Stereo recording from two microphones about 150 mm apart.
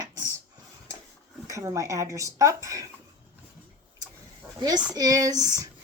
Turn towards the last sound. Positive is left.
turn(degrees=-25)  # may be behind; listen again after turning